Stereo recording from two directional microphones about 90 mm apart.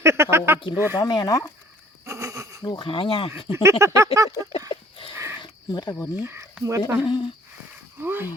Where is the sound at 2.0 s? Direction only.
35° right (ahead or behind).